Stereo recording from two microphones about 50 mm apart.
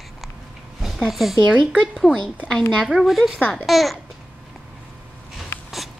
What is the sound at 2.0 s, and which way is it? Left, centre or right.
Speech, centre.